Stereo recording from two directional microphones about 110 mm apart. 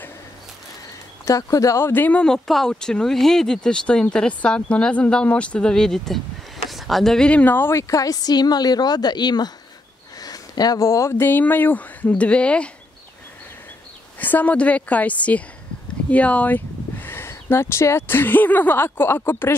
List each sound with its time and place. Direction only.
1.2 s a woman's voice: 30° left (ahead or behind)
1.9 s a woman's voice: 15° left (ahead or behind)
14.2 s speech: 15° left (ahead or behind)